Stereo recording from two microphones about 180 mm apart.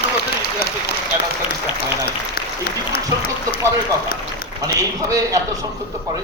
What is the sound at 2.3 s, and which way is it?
Speech, 60° left (ahead or behind).